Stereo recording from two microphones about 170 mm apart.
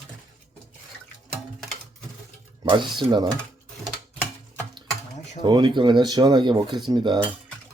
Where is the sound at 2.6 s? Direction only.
25° right (ahead or behind).